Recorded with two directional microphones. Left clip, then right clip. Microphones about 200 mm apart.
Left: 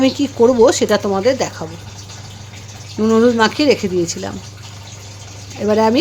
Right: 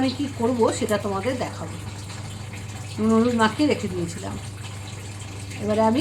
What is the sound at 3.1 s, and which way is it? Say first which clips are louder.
Speech: left 8 dB; 55° left (ahead or behind).